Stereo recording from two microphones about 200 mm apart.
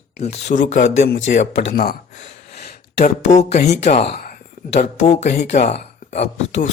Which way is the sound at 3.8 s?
30° left (ahead or behind).